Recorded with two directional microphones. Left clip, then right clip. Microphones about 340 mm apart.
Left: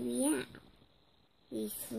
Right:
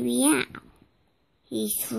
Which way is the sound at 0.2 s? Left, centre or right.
Right.